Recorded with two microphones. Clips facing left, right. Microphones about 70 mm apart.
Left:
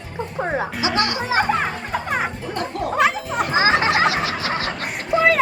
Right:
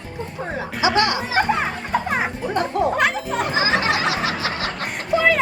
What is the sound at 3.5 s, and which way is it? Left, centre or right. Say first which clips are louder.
Music: left 4 dB; left.